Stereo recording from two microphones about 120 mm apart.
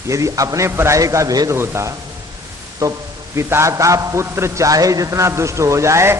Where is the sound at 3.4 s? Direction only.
20° right (ahead or behind).